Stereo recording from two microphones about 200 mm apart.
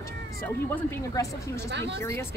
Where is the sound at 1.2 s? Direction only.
15° left (ahead or behind).